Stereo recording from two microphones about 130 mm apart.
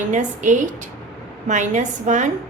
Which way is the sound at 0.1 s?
75° right (ahead or behind).